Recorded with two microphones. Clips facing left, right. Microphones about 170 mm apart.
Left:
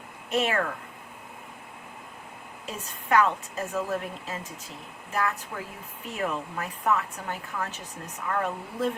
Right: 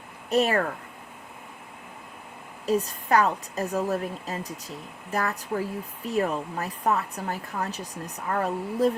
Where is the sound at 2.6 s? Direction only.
35° right (ahead or behind).